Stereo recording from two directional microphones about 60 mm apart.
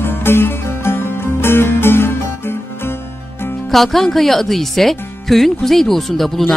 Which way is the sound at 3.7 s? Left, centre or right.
Centre.